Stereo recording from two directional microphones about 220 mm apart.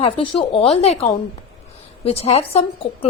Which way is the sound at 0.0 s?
25° left (ahead or behind).